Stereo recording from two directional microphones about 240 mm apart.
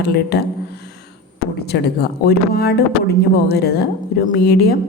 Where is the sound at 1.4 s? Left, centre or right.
Left.